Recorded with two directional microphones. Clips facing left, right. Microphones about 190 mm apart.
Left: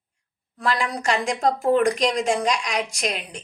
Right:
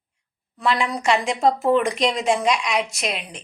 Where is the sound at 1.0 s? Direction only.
40° left (ahead or behind).